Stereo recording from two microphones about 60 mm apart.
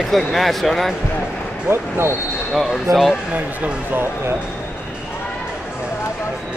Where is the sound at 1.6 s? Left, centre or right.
Right.